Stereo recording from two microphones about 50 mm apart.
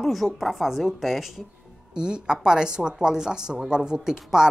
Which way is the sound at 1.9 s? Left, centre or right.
Centre.